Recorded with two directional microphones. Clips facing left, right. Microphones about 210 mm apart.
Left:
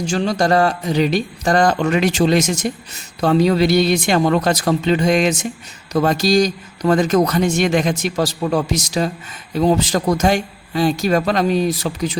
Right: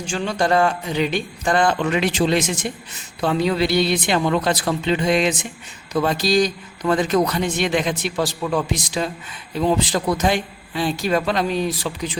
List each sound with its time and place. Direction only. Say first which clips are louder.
0.0 s a man's voice: left 4 dB; 40° left (ahead or behind)